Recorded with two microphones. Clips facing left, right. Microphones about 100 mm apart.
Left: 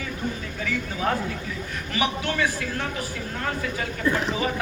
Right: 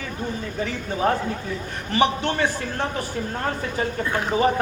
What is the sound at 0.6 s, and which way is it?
A man's voice, 35° right (ahead or behind).